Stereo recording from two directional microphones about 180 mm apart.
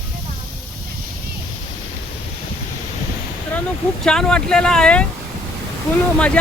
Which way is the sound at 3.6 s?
5° left (ahead or behind).